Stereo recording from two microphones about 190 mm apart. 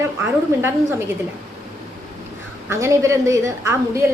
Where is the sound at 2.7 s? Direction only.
15° right (ahead or behind).